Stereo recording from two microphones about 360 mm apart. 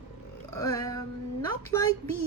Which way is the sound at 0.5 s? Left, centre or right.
Centre.